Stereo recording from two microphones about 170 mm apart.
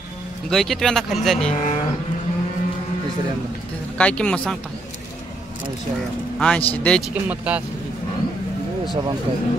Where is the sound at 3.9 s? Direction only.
5° left (ahead or behind).